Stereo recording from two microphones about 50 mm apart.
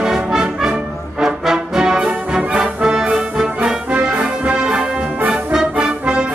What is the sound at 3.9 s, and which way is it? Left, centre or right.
Music, right.